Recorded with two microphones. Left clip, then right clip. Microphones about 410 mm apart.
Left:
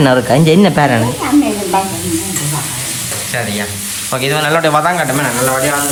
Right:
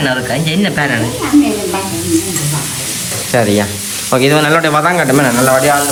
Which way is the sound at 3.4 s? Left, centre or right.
Centre.